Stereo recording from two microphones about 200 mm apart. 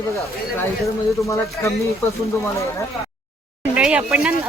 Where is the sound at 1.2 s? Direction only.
15° left (ahead or behind).